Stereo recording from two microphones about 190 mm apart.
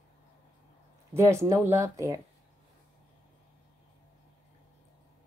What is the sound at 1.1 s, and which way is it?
A woman's voice, 15° right (ahead or behind).